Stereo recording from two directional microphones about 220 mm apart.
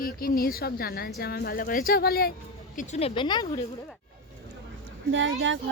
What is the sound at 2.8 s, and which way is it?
Speech, 30° left (ahead or behind).